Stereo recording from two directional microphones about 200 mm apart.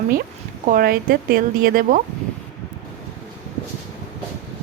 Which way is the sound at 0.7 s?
45° right (ahead or behind).